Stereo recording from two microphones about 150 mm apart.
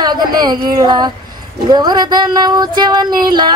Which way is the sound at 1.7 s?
25° right (ahead or behind).